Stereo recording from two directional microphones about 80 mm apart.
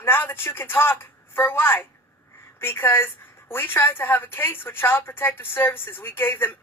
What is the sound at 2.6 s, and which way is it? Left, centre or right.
A woman's voice, left.